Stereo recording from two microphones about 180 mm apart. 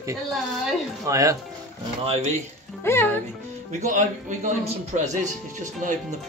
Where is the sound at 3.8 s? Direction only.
45° right (ahead or behind).